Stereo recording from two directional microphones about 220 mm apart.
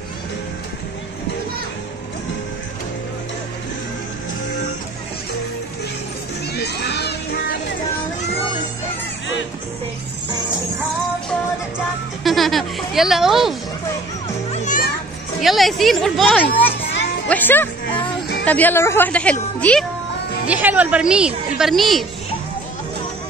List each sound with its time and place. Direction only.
6.5 s children playing: 50° left (ahead or behind)
12.2 s speech: centre (ahead or behind)
14.5 s children playing: 35° left (ahead or behind)
15.4 s a woman's voice: centre (ahead or behind)
20.4 s speech: 5° right (ahead or behind)